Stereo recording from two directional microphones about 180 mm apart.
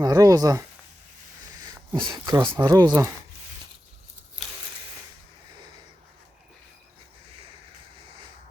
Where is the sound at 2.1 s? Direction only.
20° right (ahead or behind).